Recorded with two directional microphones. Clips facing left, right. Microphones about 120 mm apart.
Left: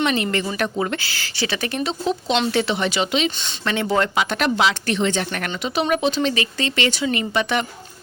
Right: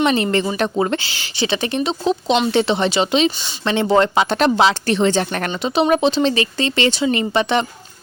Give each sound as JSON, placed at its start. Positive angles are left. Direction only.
{"t": 0.0, "sound": "speech", "side_deg": -30}